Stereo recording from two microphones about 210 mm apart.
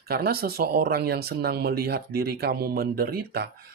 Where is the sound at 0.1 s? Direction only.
50° right (ahead or behind).